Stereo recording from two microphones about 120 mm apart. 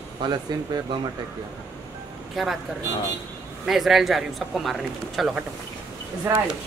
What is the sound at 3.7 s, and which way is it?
Speech, centre (ahead or behind).